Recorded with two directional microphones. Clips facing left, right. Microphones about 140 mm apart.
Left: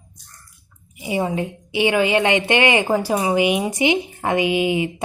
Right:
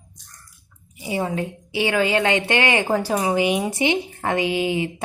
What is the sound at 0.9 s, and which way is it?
A woman's voice, 15° left (ahead or behind).